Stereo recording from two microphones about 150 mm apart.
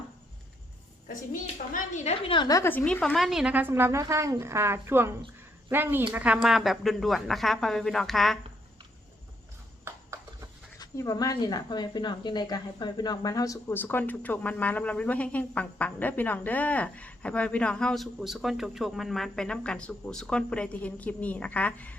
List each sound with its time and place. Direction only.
1.0 s a woman's voice: 65° left (ahead or behind)
2.2 s a woman's voice: 30° left (ahead or behind); by 8.4 s centre (ahead or behind)
9.8 s horse: 20° right (ahead or behind)
10.8 s speech: 25° left (ahead or behind)